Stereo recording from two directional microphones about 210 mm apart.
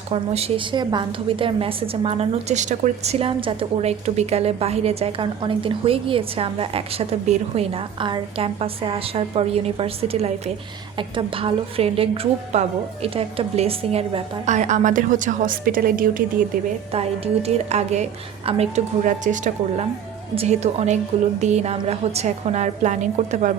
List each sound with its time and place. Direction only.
0.1 s a woman's voice: 30° right (ahead or behind)
16.9 s a woman's voice: 30° right (ahead or behind)